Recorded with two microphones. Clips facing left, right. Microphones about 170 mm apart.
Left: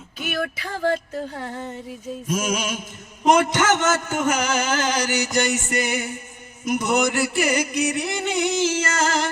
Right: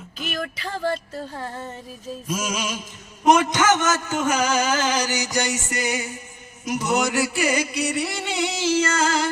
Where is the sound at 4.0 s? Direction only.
50° left (ahead or behind).